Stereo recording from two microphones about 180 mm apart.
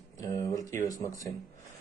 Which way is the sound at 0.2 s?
20° left (ahead or behind).